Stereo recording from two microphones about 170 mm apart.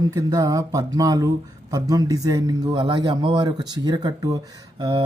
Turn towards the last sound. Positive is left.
turn(degrees=-25)  # may be behind; listen again after turning